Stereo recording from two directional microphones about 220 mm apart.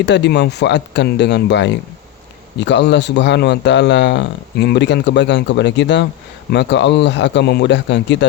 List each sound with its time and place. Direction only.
0.0 s speech: 50° left (ahead or behind)